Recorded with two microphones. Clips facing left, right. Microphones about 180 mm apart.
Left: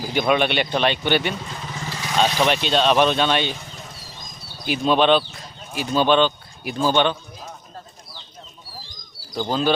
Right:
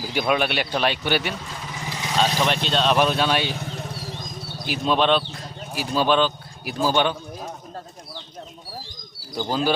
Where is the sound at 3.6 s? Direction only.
65° right (ahead or behind).